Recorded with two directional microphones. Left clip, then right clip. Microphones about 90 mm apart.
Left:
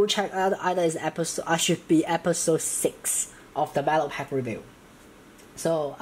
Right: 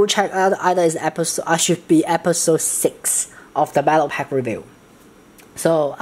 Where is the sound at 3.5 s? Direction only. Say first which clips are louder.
Right 8 dB; 50° right (ahead or behind).